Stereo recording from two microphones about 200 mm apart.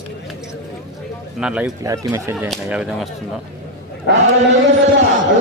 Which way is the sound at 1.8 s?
15° right (ahead or behind).